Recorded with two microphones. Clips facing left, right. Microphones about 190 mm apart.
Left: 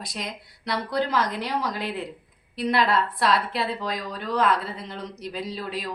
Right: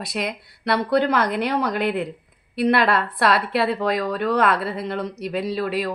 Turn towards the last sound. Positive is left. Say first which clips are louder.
# right 8 dB
turn(degrees=-65)  # may be behind; listen again after turning